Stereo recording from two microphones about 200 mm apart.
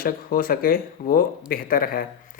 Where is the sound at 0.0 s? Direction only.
45° left (ahead or behind).